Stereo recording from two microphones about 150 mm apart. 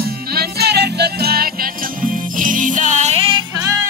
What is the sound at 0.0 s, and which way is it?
Music, 90° right.